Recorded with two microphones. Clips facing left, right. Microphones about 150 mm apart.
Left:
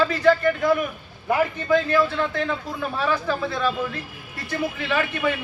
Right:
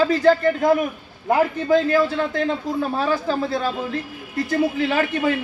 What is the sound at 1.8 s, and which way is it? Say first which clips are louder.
A man's voice: right 2 dB; 40° right (ahead or behind).